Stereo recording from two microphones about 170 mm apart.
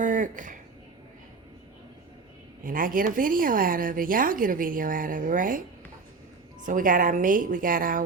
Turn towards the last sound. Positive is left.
turn(degrees=-55)  # may be behind; listen again after turning